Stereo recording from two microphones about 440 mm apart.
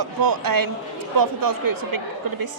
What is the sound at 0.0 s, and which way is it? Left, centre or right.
A woman's voice, right.